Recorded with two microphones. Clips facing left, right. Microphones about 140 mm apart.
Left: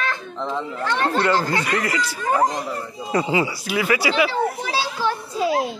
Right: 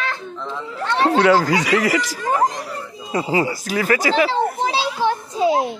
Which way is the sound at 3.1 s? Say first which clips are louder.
Right 1 dB; 35° right (ahead or behind).